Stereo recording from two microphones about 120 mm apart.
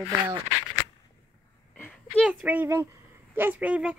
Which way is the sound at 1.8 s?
10° left (ahead or behind).